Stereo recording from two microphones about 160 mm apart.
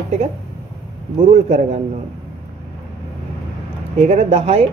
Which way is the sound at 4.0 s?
45° right (ahead or behind).